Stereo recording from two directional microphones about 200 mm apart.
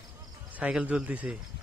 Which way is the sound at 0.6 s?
5° right (ahead or behind).